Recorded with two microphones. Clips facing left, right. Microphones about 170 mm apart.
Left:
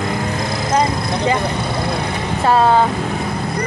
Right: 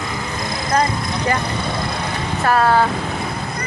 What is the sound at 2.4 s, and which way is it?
Speech, 25° left (ahead or behind).